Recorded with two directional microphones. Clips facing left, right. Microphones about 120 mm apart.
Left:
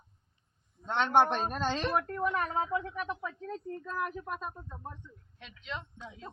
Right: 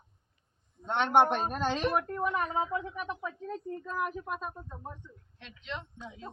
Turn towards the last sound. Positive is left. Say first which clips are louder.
# right 2 dB
turn(degrees=0)  # may be behind; listen again after turning